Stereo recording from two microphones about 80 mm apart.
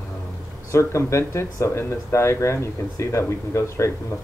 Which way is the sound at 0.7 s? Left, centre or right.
Left.